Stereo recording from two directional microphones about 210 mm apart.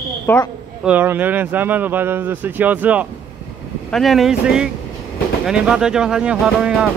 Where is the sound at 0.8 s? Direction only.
10° right (ahead or behind).